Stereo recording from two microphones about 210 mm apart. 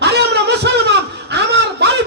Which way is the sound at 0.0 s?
55° right (ahead or behind).